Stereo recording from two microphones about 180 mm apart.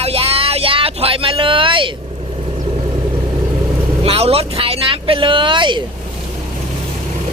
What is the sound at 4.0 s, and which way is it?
Vehicle, 35° right (ahead or behind).